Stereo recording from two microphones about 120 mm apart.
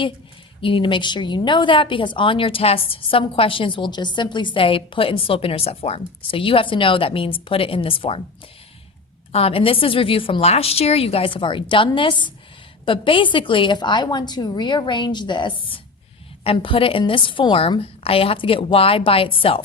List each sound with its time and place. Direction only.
0.6 s a woman's voice: 45° left (ahead or behind)
9.3 s a woman's voice: 55° left (ahead or behind)